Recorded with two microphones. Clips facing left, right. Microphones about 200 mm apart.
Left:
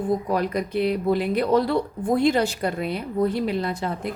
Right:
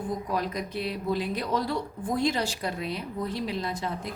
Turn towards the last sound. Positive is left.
turn(degrees=60)  # may be behind; listen again after turning